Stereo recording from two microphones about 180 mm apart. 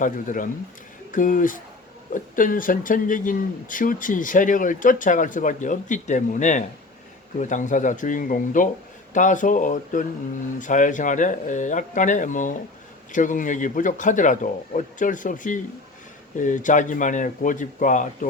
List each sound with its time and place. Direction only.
0.0 s speech: 45° left (ahead or behind)